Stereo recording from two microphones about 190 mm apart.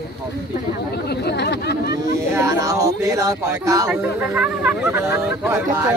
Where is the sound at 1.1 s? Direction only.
60° left (ahead or behind).